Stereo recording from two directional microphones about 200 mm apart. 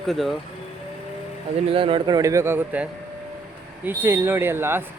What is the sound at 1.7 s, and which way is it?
Speech, 25° right (ahead or behind).